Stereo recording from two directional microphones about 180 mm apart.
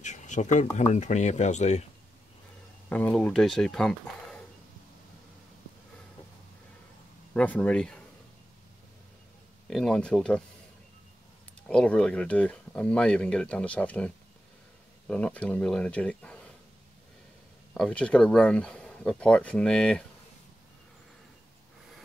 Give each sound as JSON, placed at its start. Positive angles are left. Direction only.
{"t": 0.0, "sound": "a sound", "side_deg": 40}
{"t": 0.7, "sound": "speech", "side_deg": 40}
{"t": 2.9, "sound": "speech", "side_deg": 5}
{"t": 7.3, "sound": "speech", "side_deg": 10}
{"t": 9.7, "sound": "speech", "side_deg": 0}
{"t": 11.6, "sound": "speech", "side_deg": 5}
{"t": 17.7, "sound": "speech", "side_deg": 5}